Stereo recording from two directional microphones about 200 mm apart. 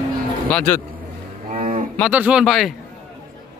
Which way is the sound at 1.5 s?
35° right (ahead or behind).